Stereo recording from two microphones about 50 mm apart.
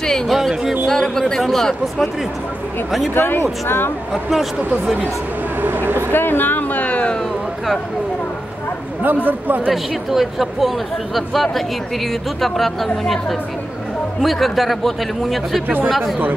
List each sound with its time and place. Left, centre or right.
0.3 s speech: centre
0.8 s speech: centre
3.2 s speech: left
4.1 s speech: centre
5.6 s speech: right
6.1 s a sound: left
9.0 s speech: right
9.7 s speech: centre